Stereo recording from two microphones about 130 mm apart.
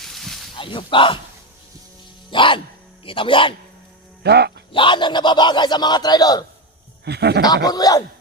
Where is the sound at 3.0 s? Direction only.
40° left (ahead or behind).